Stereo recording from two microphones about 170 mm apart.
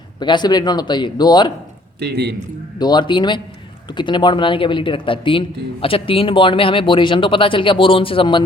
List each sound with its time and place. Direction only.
0.2 s a man's voice: 25° left (ahead or behind)
2.0 s speech: 75° right (ahead or behind)
2.7 s a man's voice: 25° left (ahead or behind)